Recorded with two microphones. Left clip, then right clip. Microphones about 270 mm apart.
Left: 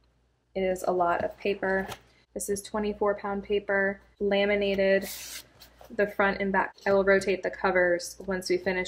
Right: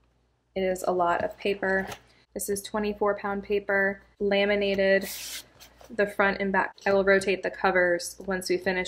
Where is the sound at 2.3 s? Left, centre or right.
Right.